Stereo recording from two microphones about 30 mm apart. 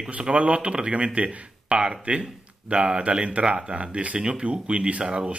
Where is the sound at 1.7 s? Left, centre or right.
Right.